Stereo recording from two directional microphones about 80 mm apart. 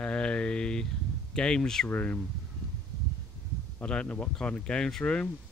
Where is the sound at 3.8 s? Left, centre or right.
Centre.